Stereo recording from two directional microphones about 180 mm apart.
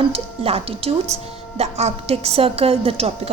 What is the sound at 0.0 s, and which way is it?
A woman's voice, 30° right (ahead or behind).